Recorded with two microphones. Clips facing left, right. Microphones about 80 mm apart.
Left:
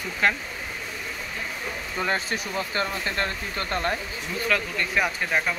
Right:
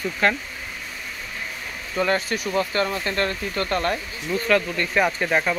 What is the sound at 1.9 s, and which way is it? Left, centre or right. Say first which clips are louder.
Speech: right 5 dB; left.